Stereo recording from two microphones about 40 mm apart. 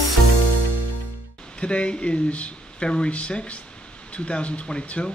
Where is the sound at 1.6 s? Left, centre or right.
Left.